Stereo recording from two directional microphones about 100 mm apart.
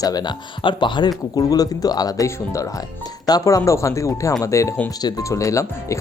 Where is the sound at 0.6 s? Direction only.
55° left (ahead or behind).